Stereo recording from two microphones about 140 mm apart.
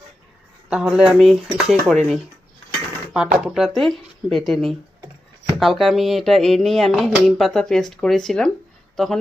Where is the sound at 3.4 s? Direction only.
Centre (ahead or behind).